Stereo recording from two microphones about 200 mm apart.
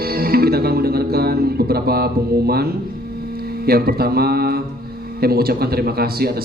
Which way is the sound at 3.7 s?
50° right (ahead or behind).